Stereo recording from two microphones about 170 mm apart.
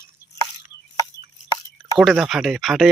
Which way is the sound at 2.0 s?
5° right (ahead or behind).